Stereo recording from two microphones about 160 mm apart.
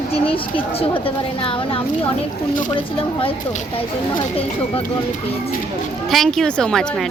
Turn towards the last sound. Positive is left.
turn(degrees=5)  # may be behind; listen again after turning